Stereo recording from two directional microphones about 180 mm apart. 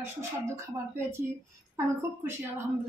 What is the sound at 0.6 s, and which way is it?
Speech, 15° right (ahead or behind).